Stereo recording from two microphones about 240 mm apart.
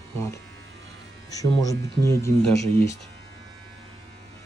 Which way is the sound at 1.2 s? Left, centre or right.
Centre.